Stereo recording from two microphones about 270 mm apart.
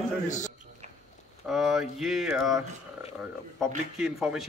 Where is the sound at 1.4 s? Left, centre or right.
Centre.